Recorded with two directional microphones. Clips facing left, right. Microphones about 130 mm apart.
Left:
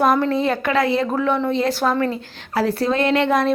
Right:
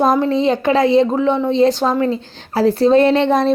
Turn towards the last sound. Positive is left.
turn(degrees=-25)  # may be behind; listen again after turning